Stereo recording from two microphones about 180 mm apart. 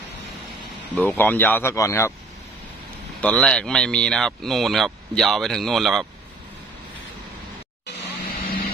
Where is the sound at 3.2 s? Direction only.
5° left (ahead or behind).